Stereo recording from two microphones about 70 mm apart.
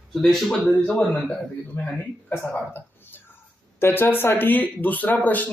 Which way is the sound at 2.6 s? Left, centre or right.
Left.